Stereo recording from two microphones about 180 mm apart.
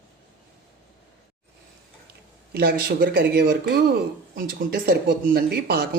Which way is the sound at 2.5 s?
60° right (ahead or behind).